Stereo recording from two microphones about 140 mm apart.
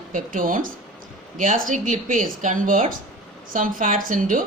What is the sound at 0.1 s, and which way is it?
A woman's voice, 70° right (ahead or behind).